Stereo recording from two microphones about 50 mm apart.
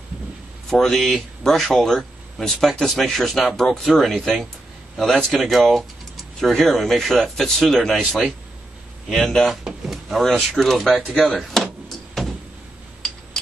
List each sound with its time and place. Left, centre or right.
0.7 s speech: centre
9.7 s drawer open or close: centre
10.5 s speech: centre
11.0 s speech: centre
11.3 s speech: centre